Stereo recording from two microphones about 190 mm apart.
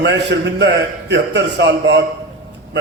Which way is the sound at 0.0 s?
65° right (ahead or behind).